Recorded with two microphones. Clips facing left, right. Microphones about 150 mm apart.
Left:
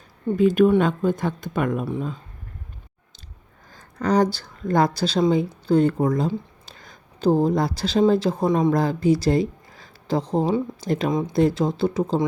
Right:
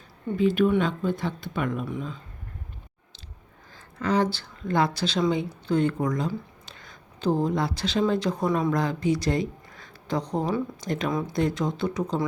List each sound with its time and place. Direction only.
0.3 s speech: 45° left (ahead or behind)
3.7 s speech: 40° left (ahead or behind)